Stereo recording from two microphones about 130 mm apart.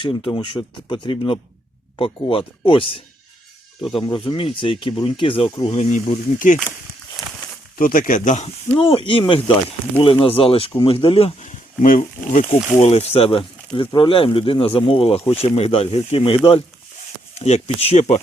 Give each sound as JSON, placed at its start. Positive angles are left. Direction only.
{"t": 0.0, "sound": "speech", "side_deg": 40}
{"t": 5.7, "sound": "speech", "side_deg": 65}
{"t": 7.2, "sound": "a sound", "side_deg": 0}
{"t": 7.8, "sound": "speech", "side_deg": 90}
{"t": 8.8, "sound": "speech", "side_deg": 45}
{"t": 17.3, "sound": "speech", "side_deg": 55}